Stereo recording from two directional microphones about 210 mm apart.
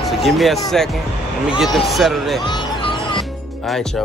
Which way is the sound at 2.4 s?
20° left (ahead or behind).